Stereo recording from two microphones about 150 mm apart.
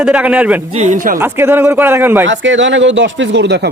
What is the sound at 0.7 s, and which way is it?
Speech, 55° right (ahead or behind).